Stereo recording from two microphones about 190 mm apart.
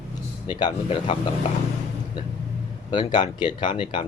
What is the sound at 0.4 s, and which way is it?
Speech, 30° left (ahead or behind).